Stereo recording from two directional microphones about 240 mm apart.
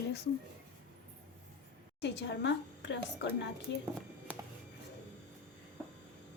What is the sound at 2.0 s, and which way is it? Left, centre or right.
A woman's voice, left.